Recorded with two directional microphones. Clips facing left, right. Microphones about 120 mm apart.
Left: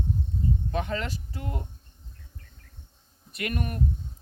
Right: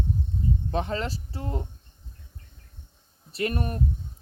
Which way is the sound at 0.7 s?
30° right (ahead or behind).